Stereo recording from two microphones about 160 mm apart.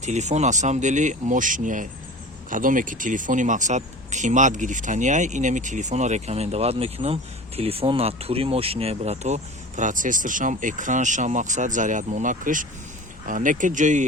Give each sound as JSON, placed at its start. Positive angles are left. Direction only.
{"t": 0.0, "sound": "speech", "side_deg": -45}